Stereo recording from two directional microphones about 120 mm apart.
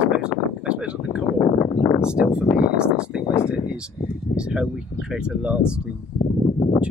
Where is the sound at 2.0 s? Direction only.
5° right (ahead or behind).